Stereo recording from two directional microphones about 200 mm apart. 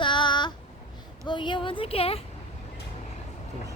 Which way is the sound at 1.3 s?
25° left (ahead or behind).